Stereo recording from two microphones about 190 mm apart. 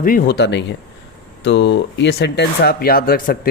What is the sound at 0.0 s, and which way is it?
Speech, 50° left (ahead or behind).